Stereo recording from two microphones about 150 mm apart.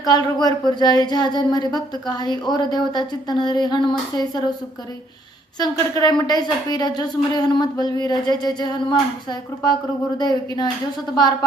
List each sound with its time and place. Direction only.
0.0 s speech: 25° left (ahead or behind)
5.5 s speech: 25° left (ahead or behind)
10.2 s speech: 25° left (ahead or behind)